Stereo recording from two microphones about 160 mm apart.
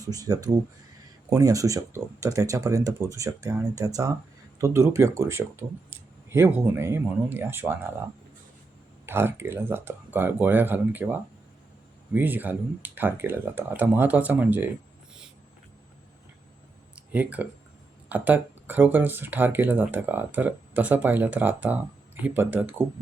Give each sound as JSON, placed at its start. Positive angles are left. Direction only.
{"t": 0.0, "sound": "speech", "side_deg": -20}
{"t": 9.0, "sound": "speech", "side_deg": -15}
{"t": 16.9, "sound": "a sound", "side_deg": -10}
{"t": 18.1, "sound": "speech", "side_deg": -10}